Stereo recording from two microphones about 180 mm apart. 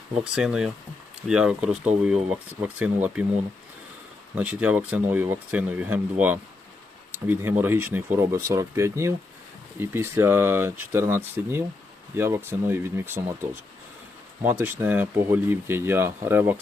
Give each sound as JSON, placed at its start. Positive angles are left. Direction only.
{"t": 0.3, "sound": "speech", "side_deg": -5}
{"t": 4.4, "sound": "speech", "side_deg": -10}